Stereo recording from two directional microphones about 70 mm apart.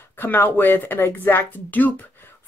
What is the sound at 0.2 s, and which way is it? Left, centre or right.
Speech, left.